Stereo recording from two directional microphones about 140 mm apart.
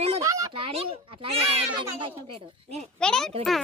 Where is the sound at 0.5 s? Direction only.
40° right (ahead or behind).